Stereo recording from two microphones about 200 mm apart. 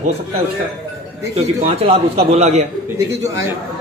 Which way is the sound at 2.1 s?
35° right (ahead or behind).